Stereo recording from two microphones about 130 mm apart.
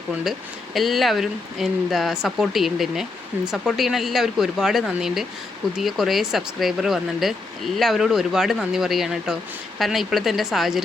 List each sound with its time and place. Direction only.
0.3 s speech: centre (ahead or behind)